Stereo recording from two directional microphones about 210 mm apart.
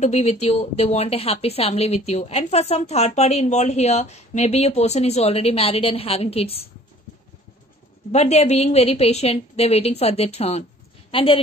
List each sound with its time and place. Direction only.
0.0 s a woman's voice: 30° left (ahead or behind)
8.1 s a woman's voice: 30° left (ahead or behind)